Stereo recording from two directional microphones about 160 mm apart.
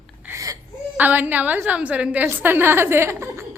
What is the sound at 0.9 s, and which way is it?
A woman's voice, 10° right (ahead or behind).